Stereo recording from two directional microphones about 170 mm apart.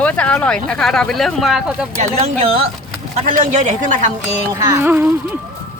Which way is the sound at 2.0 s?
40° right (ahead or behind).